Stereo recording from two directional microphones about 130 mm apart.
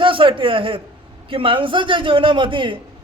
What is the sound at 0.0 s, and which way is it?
A man's voice, 40° right (ahead or behind).